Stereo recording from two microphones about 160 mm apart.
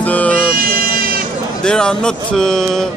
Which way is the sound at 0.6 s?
65° right (ahead or behind).